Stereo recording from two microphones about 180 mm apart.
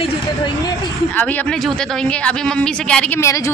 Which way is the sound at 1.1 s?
10° left (ahead or behind).